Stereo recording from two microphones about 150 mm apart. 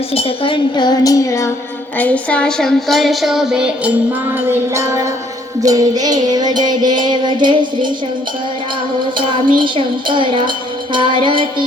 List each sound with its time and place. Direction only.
0.1 s child singing: 40° left (ahead or behind); by 1.5 s 20° left (ahead or behind)
2.0 s a woman's voice: 10° left (ahead or behind); by 3.9 s 5° right (ahead or behind)
4.4 s music: 20° right (ahead or behind)
9.6 s speech: 35° right (ahead or behind)